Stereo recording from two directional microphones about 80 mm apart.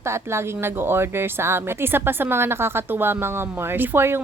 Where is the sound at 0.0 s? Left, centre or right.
Right.